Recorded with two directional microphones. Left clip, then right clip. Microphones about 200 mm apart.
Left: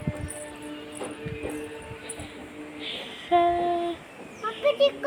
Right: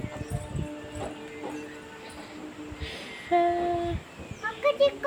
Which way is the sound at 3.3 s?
10° right (ahead or behind).